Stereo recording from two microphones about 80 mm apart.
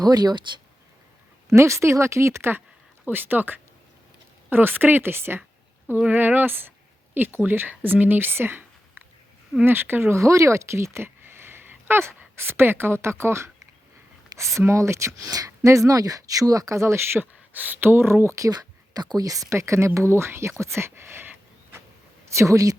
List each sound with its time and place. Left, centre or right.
0.0 s speech: right
1.5 s speech: right
6.1 s a sound: right
7.4 s speech: right
14.6 s speech: right
22.4 s a woman's voice: right